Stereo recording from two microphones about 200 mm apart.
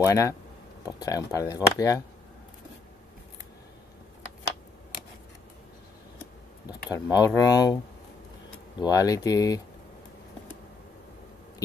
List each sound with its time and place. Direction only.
0.0 s speech: 15° left (ahead or behind)
6.9 s speech: 20° left (ahead or behind)